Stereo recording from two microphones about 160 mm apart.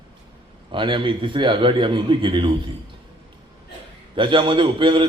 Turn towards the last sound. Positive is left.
turn(degrees=-30)  # may be behind; listen again after turning